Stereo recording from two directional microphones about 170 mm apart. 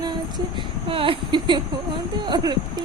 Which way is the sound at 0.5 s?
30° right (ahead or behind).